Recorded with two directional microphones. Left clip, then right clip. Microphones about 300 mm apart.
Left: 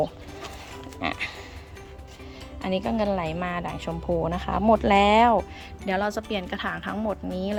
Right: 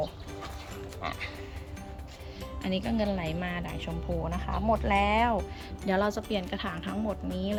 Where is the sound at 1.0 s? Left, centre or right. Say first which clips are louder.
Left 7 dB; left.